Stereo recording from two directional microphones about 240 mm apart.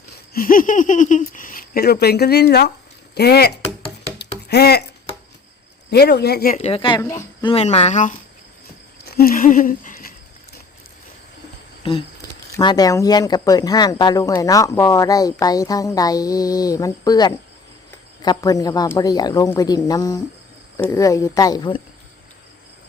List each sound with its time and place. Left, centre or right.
0.3 s speech: left
4.2 s a sound: left
5.9 s speech: left
6.6 s speech: left
7.5 s speech: left
11.8 s speech: left